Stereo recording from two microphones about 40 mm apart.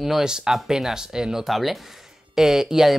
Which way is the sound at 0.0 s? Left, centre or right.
Centre.